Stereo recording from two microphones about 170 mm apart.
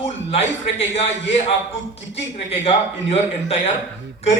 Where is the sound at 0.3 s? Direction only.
35° left (ahead or behind).